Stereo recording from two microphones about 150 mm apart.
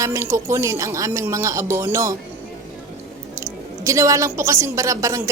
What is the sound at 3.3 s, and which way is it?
A woman's voice, 20° right (ahead or behind).